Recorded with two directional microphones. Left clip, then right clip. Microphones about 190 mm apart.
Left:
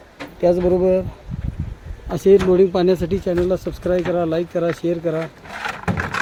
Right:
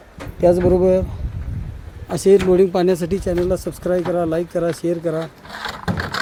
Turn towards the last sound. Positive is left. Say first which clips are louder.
# left 1 dB
turn(degrees=0)  # may be behind; listen again after turning